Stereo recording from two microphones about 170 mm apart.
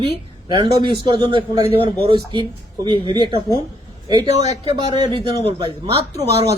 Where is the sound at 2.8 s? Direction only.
30° right (ahead or behind).